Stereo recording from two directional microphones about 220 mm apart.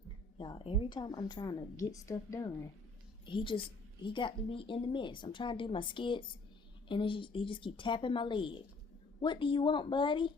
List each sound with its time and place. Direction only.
0.3 s a woman's voice: 20° left (ahead or behind)